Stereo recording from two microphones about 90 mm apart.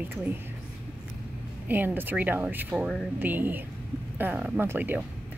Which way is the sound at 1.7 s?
20° right (ahead or behind).